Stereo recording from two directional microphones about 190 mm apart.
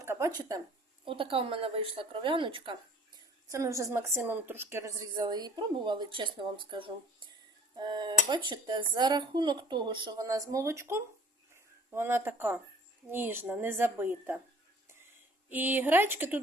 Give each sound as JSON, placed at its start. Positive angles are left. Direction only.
{"t": 0.0, "sound": "a sound", "side_deg": -15}
{"t": 0.3, "sound": "a woman's voice", "side_deg": -20}
{"t": 3.5, "sound": "a woman's voice", "side_deg": -15}
{"t": 15.4, "sound": "a woman's voice", "side_deg": -10}